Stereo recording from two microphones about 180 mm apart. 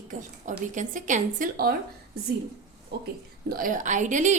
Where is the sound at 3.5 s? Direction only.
50° right (ahead or behind).